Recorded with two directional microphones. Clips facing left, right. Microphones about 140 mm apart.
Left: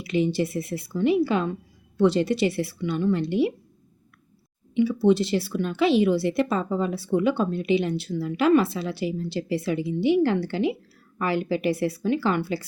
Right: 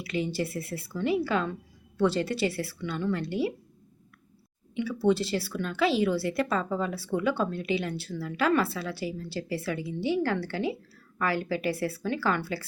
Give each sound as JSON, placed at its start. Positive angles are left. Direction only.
{"t": 0.0, "sound": "a woman's voice", "side_deg": 20}
{"t": 4.7, "sound": "speech", "side_deg": 20}